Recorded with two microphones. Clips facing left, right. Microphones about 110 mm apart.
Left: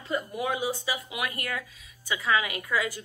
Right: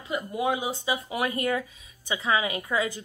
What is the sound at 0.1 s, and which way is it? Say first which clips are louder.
A woman's voice: right 2 dB; 20° right (ahead or behind).